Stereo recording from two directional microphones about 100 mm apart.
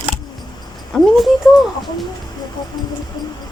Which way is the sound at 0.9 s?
5° left (ahead or behind).